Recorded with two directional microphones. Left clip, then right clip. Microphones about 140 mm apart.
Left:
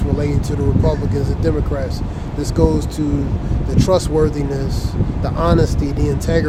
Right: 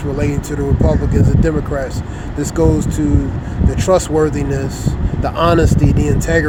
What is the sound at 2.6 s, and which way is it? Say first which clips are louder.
Speech: right 2 dB; 20° right (ahead or behind).